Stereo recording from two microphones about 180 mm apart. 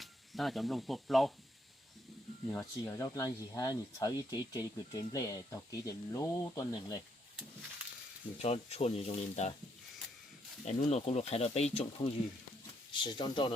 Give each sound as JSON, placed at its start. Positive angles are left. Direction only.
{"t": 0.0, "sound": "speech", "side_deg": 0}
{"t": 2.5, "sound": "speech", "side_deg": 15}
{"t": 8.4, "sound": "speech", "side_deg": 35}
{"t": 10.7, "sound": "speech", "side_deg": 40}